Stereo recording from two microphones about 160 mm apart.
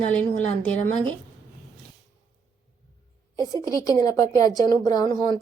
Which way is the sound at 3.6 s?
20° left (ahead or behind).